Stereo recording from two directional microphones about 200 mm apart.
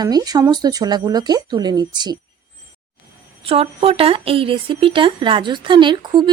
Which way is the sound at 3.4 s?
30° right (ahead or behind).